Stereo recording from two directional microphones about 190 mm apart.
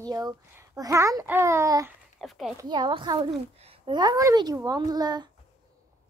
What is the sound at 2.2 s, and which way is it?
Speech, centre (ahead or behind).